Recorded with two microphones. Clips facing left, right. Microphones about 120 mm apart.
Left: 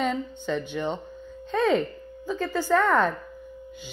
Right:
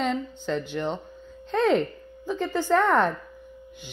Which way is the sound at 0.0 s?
5° left (ahead or behind).